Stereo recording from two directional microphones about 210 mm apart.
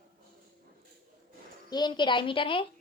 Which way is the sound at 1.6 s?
20° left (ahead or behind).